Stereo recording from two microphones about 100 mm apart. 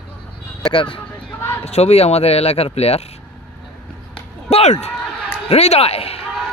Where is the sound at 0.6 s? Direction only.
60° left (ahead or behind).